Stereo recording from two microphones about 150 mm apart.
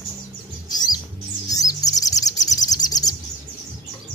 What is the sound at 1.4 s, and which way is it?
Chirp, 25° left (ahead or behind).